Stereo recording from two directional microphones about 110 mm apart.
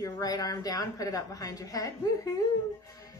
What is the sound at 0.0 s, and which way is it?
A woman's voice, 30° left (ahead or behind).